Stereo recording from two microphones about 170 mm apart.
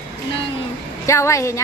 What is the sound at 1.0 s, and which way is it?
Speech, 15° left (ahead or behind).